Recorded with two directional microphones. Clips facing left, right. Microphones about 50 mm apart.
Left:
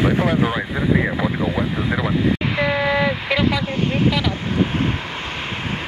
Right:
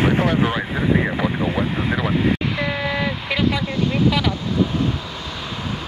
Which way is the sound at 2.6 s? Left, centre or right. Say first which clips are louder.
Left 4 dB; centre.